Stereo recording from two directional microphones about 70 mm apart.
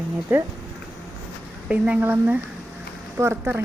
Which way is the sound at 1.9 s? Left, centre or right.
Right.